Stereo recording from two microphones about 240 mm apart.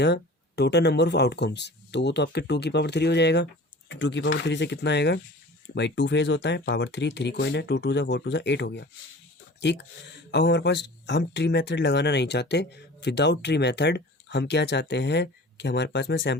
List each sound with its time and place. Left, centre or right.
0.0 s speech: left